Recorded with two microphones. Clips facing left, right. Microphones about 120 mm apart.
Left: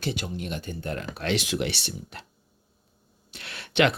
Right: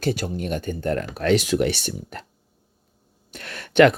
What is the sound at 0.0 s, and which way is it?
Speech, 45° right (ahead or behind).